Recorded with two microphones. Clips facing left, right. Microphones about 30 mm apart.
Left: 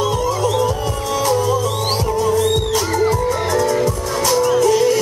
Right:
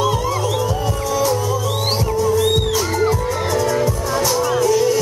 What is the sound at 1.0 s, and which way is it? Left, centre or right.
Music, centre.